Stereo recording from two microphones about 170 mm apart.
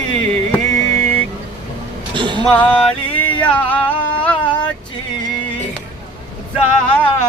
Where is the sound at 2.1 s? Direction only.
30° right (ahead or behind).